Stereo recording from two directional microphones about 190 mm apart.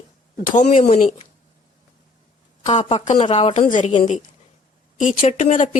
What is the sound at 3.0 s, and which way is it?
A woman's voice, 35° left (ahead or behind).